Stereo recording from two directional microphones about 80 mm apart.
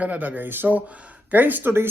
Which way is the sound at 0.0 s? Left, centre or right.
Centre.